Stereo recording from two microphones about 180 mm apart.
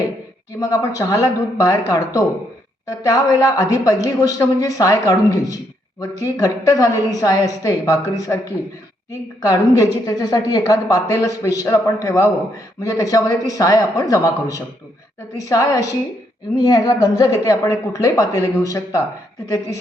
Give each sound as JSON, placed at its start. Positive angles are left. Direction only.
{"t": 0.6, "sound": "a woman's voice", "side_deg": 20}
{"t": 9.4, "sound": "a woman's voice", "side_deg": 20}